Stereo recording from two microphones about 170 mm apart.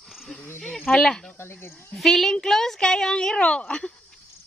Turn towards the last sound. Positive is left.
turn(degrees=5)  # may be behind; listen again after turning